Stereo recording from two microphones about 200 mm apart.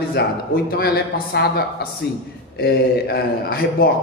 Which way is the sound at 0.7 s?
50° left (ahead or behind).